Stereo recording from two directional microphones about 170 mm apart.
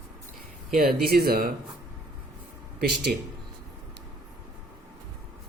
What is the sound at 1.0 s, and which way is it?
Speech, 65° right (ahead or behind).